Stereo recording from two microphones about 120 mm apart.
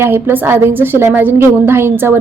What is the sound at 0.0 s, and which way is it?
A woman's voice, 20° right (ahead or behind).